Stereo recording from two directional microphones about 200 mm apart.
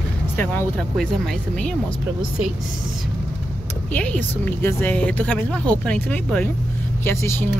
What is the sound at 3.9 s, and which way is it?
A woman's voice, 5° left (ahead or behind).